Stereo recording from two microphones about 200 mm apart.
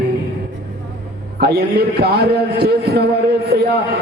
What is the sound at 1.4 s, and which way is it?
A man's voice, 55° right (ahead or behind).